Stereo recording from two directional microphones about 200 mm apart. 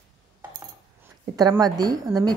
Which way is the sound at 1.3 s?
20° right (ahead or behind).